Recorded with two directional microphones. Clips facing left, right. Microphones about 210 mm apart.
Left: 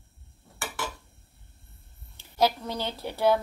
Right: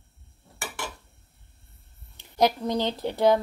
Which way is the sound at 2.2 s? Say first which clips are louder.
Right 2 dB; 15° right (ahead or behind).